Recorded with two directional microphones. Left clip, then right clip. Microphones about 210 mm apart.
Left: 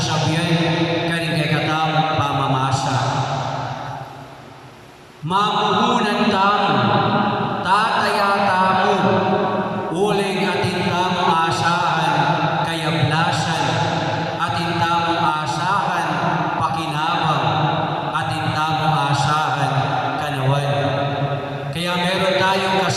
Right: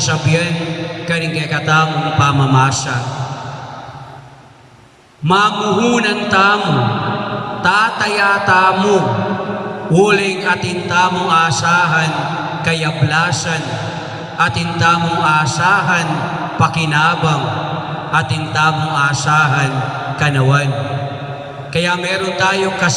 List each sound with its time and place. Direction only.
1.1 s mantra: 50° right (ahead or behind)
5.3 s a man's voice: 50° right (ahead or behind)
7.6 s mantra: 50° right (ahead or behind)
10.0 s a man's voice: 50° right (ahead or behind)
18.1 s a man's voice: 50° right (ahead or behind)
21.8 s a man's voice: 50° right (ahead or behind)